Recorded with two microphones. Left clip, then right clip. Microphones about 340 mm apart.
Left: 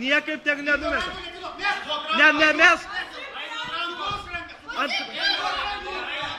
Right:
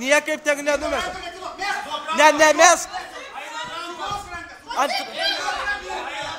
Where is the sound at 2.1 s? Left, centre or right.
Centre.